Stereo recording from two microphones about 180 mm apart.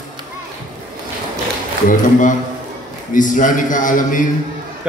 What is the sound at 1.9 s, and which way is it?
A man's voice, 45° left (ahead or behind).